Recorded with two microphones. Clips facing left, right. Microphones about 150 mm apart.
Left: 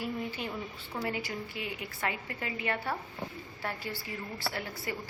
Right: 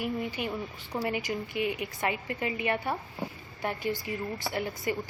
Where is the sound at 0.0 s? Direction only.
15° right (ahead or behind).